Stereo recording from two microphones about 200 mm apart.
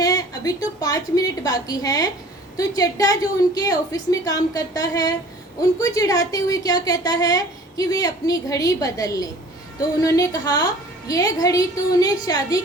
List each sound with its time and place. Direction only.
0.0 s a woman's voice: 20° left (ahead or behind)